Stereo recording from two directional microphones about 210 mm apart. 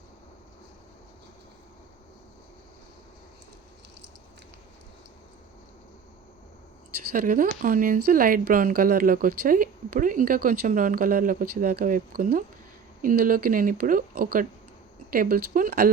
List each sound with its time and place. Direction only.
7.1 s a woman's voice: 40° right (ahead or behind)